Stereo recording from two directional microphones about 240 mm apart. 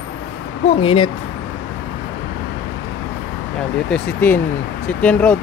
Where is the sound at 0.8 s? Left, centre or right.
Left.